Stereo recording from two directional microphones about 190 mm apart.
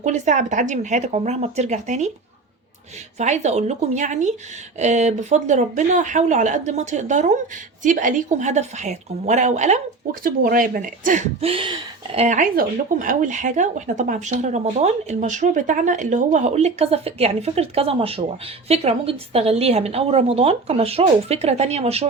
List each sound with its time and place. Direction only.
0.0 s speech: 40° right (ahead or behind)
3.2 s speech: 35° right (ahead or behind)